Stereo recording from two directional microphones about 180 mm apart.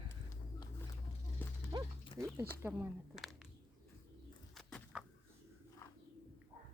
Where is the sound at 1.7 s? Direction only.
25° right (ahead or behind).